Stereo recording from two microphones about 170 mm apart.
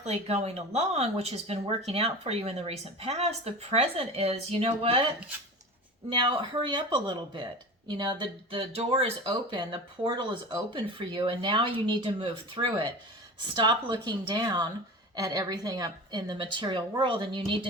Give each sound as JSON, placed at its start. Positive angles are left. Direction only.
{"t": 0.0, "sound": "speech", "side_deg": -40}
{"t": 6.1, "sound": "speech", "side_deg": -30}